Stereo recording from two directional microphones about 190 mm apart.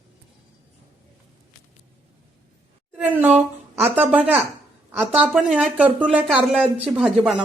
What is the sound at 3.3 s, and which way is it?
Speech, 35° right (ahead or behind).